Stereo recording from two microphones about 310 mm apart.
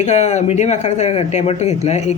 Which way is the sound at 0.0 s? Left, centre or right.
Left.